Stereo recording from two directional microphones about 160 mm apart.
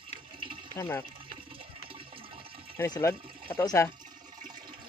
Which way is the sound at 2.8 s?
20° left (ahead or behind).